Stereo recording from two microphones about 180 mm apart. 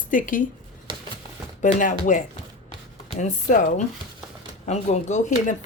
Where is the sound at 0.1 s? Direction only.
50° left (ahead or behind).